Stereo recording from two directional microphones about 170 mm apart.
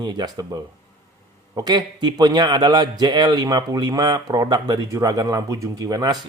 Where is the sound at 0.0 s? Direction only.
25° right (ahead or behind).